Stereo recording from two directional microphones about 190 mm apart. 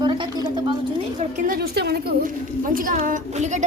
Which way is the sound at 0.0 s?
25° right (ahead or behind).